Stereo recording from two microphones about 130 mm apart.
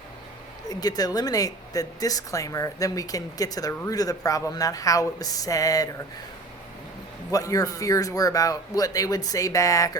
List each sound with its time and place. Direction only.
0.7 s speech: 30° left (ahead or behind)
7.3 s speech: 25° left (ahead or behind)